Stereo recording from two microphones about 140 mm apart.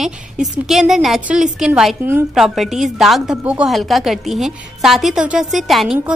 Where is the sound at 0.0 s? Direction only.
Centre (ahead or behind).